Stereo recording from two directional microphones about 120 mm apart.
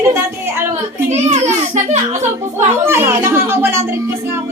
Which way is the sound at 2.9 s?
20° right (ahead or behind).